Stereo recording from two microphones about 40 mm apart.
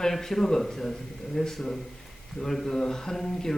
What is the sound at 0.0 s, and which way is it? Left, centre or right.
Speech, centre.